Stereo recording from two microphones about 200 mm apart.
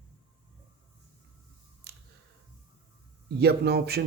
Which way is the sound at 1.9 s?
55° right (ahead or behind).